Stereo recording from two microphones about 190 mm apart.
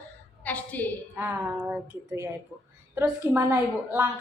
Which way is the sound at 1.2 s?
10° right (ahead or behind).